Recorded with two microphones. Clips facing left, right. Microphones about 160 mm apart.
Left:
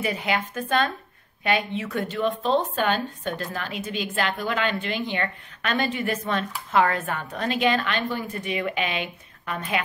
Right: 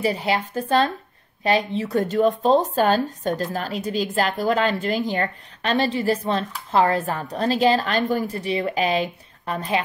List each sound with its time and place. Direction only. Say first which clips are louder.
0.0 s speech: right 4 dB; 35° right (ahead or behind)